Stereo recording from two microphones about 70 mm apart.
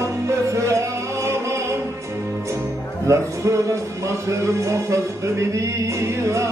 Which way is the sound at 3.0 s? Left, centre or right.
Right.